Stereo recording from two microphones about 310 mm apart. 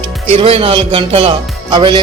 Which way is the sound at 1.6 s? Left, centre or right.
Centre.